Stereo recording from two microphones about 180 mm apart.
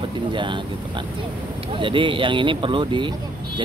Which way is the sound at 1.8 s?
30° right (ahead or behind).